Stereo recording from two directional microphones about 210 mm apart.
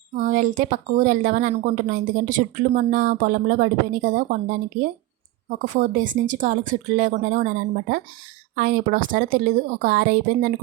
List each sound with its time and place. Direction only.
0.2 s a woman's voice: 40° right (ahead or behind)